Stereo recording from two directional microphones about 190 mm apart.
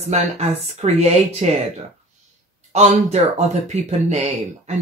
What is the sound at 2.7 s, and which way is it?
Speech, 35° right (ahead or behind).